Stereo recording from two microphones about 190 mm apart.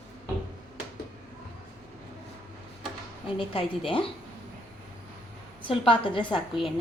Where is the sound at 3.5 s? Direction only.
30° left (ahead or behind).